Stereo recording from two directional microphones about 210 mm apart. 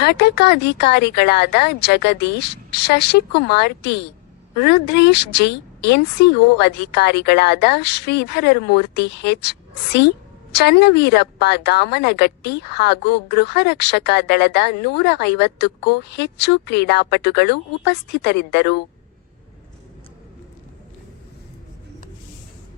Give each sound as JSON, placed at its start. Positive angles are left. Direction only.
{"t": 0.0, "sound": "a woman's voice", "side_deg": 50}